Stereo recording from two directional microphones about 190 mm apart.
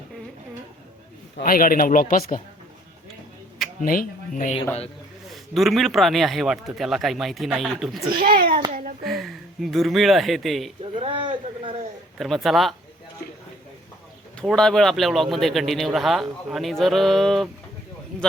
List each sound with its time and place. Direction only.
1.4 s speech: 50° left (ahead or behind)
3.8 s speech: 45° left (ahead or behind)
5.3 s speech: centre (ahead or behind)
8.2 s a sound: 50° right (ahead or behind)
9.0 s speech: centre (ahead or behind)
10.9 s a man's voice: 25° right (ahead or behind)
12.1 s speech: centre (ahead or behind)
14.3 s speech: 5° left (ahead or behind)